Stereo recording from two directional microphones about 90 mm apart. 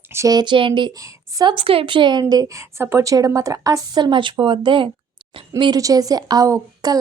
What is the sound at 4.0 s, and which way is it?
Speech, 60° right (ahead or behind).